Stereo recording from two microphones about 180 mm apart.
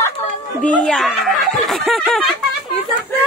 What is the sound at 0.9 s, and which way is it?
Snicker, centre (ahead or behind).